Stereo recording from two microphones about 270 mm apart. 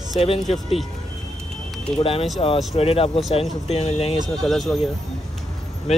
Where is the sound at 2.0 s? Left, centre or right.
Left.